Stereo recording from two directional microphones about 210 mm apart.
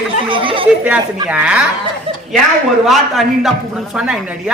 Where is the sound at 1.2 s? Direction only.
5° right (ahead or behind).